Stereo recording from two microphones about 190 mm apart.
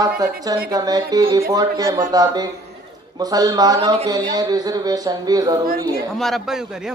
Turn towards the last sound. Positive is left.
turn(degrees=0)  # may be behind; listen again after turning